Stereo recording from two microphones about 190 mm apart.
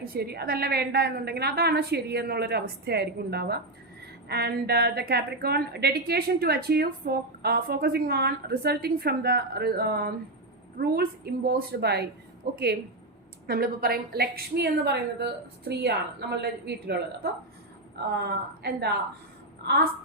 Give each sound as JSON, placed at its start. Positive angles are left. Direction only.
{"t": 0.0, "sound": "a woman's voice", "side_deg": -55}
{"t": 18.2, "sound": "a woman's voice", "side_deg": -60}